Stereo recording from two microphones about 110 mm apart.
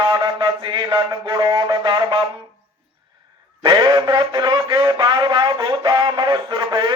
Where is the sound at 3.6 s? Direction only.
40° right (ahead or behind).